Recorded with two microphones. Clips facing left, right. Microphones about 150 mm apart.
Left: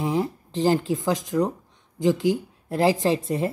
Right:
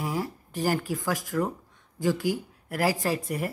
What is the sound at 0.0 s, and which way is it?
A woman's voice, 20° left (ahead or behind).